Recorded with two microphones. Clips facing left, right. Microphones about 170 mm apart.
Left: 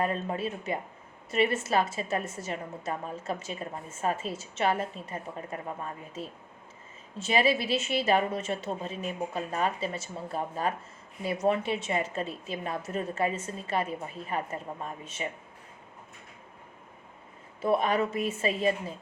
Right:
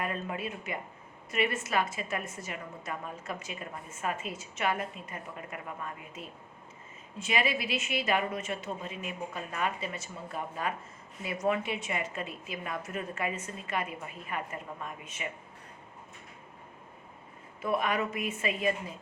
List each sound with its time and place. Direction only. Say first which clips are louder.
0.0 s a woman's voice: left 5 dB; 30° left (ahead or behind)
17.6 s a woman's voice: left 4 dB; 30° left (ahead or behind)